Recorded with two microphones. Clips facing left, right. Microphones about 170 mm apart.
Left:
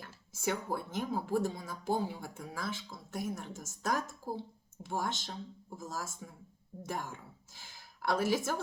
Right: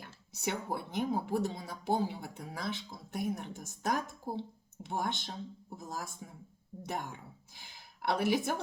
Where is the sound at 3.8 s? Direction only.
15° right (ahead or behind).